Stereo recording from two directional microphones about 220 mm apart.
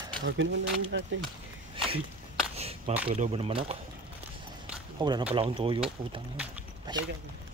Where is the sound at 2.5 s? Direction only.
25° right (ahead or behind).